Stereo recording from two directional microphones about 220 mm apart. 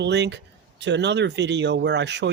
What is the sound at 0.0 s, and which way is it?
Speech, 50° right (ahead or behind).